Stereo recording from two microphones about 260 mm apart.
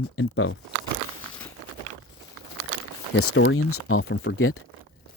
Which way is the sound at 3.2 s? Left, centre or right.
Left.